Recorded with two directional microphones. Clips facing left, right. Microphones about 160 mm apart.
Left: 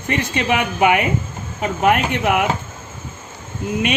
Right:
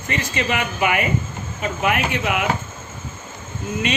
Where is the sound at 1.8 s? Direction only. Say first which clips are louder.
Left 5 dB; 55° left (ahead or behind).